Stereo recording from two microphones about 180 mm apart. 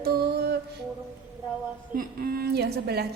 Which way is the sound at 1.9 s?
55° right (ahead or behind).